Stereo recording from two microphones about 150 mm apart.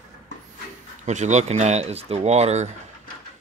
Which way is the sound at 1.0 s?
50° right (ahead or behind).